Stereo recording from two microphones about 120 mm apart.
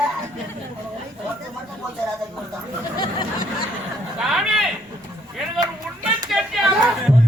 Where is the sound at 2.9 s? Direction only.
35° left (ahead or behind).